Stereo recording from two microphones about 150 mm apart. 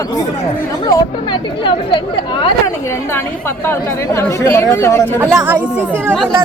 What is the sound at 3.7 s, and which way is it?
Speech, 20° left (ahead or behind).